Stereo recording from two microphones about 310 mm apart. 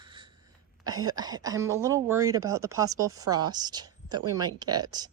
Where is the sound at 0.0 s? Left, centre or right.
Centre.